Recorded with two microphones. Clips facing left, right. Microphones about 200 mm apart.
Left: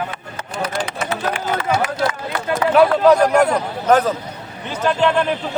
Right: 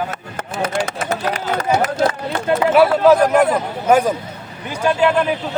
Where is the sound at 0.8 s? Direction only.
45° right (ahead or behind).